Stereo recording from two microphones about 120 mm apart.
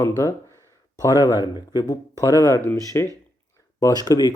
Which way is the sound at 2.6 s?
20° left (ahead or behind).